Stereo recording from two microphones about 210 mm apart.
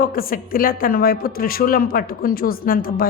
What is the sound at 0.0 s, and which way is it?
A man's voice, 45° left (ahead or behind).